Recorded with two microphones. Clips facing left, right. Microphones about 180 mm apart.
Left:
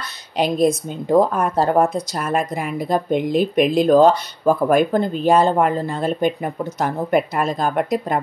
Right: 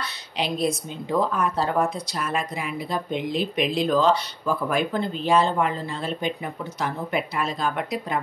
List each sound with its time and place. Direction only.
0.0 s a woman's voice: 45° left (ahead or behind)